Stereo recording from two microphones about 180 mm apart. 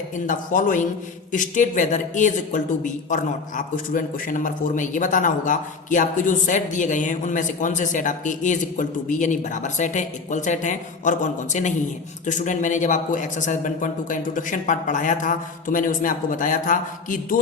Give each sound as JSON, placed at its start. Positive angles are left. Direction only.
{"t": 0.3, "sound": "speech", "side_deg": 45}